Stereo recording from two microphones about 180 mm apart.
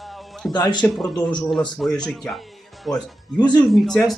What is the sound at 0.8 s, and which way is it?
Speech, centre (ahead or behind).